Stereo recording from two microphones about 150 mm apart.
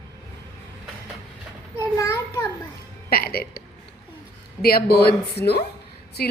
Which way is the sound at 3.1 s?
90° left.